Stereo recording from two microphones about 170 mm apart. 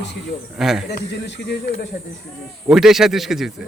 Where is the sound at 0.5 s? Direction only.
Centre (ahead or behind).